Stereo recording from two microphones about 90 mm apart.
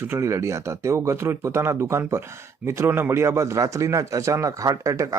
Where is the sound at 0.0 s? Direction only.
30° right (ahead or behind).